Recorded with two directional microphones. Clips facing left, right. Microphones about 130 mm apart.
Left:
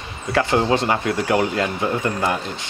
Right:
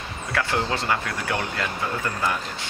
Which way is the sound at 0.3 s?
25° left (ahead or behind).